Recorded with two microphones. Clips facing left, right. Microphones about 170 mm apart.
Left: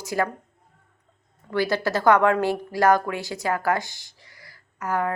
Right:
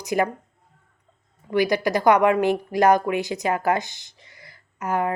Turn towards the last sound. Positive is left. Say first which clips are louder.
# right 2 dB
turn(degrees=-20)  # may be behind; listen again after turning